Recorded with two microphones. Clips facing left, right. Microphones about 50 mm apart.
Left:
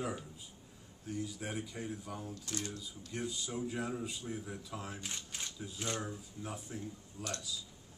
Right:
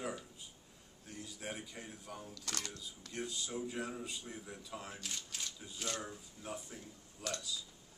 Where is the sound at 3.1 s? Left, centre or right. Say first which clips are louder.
Left 2 dB; centre.